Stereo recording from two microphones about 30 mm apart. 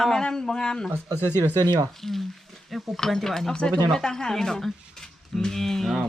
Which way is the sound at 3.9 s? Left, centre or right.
Centre.